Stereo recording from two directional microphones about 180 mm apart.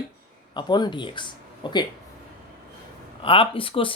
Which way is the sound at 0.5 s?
25° left (ahead or behind).